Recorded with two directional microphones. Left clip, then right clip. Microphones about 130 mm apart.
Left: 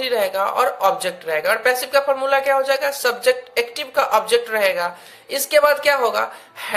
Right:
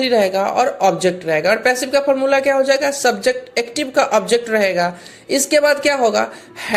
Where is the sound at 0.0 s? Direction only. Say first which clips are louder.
Right 4 dB; 20° right (ahead or behind).